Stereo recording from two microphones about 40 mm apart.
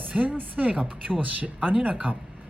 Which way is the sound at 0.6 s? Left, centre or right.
Right.